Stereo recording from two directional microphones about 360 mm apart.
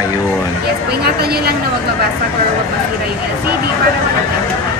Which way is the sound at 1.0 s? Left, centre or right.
Right.